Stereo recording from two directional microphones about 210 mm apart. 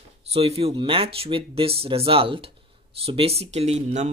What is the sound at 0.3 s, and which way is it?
Speech, 30° right (ahead or behind).